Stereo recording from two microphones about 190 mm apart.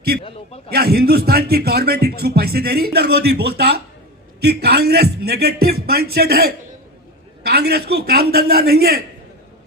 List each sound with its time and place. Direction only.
0.1 s speech: 55° right (ahead or behind)